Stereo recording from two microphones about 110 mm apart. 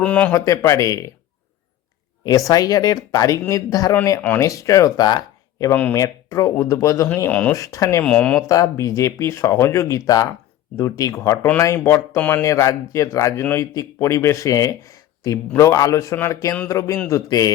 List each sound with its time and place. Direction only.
0.0 s speech: 10° left (ahead or behind)
0.3 s speech: 30° left (ahead or behind)
2.2 s speech: 35° left (ahead or behind)
7.3 s speech: 15° left (ahead or behind)
7.5 s speech: 30° left (ahead or behind)
8.0 s speech: 10° left (ahead or behind)
8.4 s speech: 30° left (ahead or behind)